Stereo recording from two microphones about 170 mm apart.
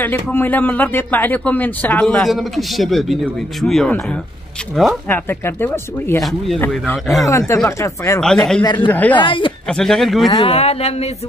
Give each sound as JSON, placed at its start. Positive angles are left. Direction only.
{"t": 0.0, "sound": "speech", "side_deg": 10}
{"t": 6.2, "sound": "speech", "side_deg": 0}
{"t": 8.2, "sound": "speech", "side_deg": 5}
{"t": 8.6, "sound": "speech", "side_deg": 25}
{"t": 9.7, "sound": "speech", "side_deg": 5}
{"t": 10.3, "sound": "speech", "side_deg": 35}